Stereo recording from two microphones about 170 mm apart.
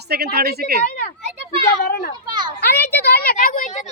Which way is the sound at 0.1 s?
65° right (ahead or behind).